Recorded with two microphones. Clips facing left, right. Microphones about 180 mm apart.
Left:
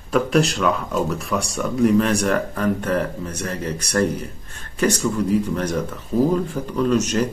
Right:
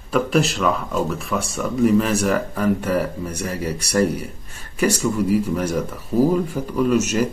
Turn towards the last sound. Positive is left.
turn(degrees=-10)  # may be behind; listen again after turning